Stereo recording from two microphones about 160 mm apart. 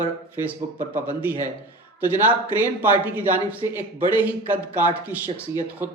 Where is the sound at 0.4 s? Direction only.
10° right (ahead or behind).